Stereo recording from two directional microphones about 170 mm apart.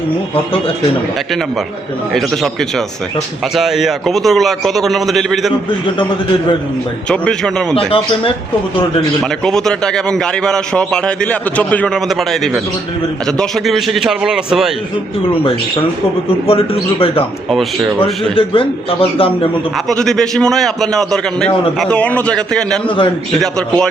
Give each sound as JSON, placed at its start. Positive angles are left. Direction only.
{"t": 2.1, "sound": "a man's voice", "side_deg": 0}
{"t": 7.1, "sound": "a man's voice", "side_deg": 5}
{"t": 7.9, "sound": "a man's voice", "side_deg": 35}
{"t": 9.2, "sound": "a man's voice", "side_deg": 5}
{"t": 15.3, "sound": "a man's voice", "side_deg": 30}
{"t": 17.5, "sound": "a man's voice", "side_deg": 0}
{"t": 18.3, "sound": "a man's voice", "side_deg": 30}
{"t": 19.7, "sound": "a man's voice", "side_deg": 0}